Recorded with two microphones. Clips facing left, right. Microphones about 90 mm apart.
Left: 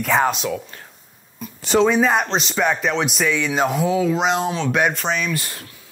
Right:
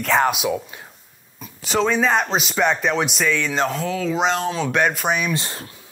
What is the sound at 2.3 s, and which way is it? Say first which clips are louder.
A man's voice: even; 5° right (ahead or behind).